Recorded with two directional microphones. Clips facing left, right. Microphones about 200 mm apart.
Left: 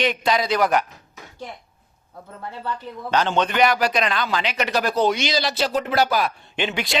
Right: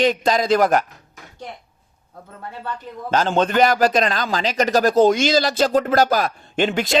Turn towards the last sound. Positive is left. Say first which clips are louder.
# right 6 dB
turn(degrees=-45)  # may be behind; listen again after turning